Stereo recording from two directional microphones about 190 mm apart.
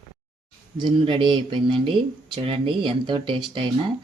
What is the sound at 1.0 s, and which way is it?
Speech, 25° right (ahead or behind).